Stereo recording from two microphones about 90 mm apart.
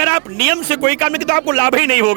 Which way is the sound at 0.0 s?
20° right (ahead or behind).